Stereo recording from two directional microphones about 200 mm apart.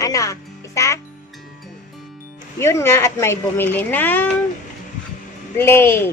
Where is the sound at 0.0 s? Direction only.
15° left (ahead or behind).